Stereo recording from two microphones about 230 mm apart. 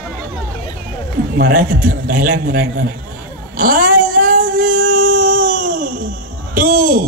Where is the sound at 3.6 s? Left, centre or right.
Right.